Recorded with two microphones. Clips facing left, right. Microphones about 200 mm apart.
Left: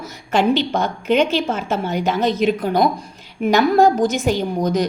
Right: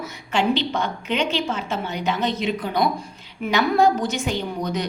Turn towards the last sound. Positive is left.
turn(degrees=40)  # may be behind; listen again after turning